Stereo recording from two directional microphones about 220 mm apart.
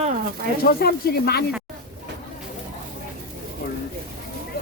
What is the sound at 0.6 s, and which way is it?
Speech, 45° left (ahead or behind).